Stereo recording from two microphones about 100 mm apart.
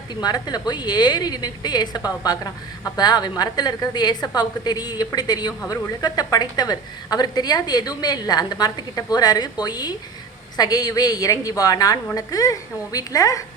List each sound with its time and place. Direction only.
0.1 s a woman's voice: 40° left (ahead or behind)